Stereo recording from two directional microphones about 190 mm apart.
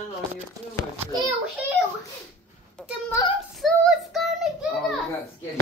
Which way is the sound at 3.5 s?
Centre (ahead or behind).